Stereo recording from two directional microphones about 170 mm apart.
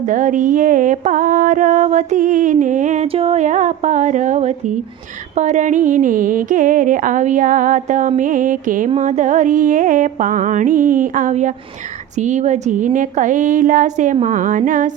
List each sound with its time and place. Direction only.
0.1 s mantra: 50° right (ahead or behind)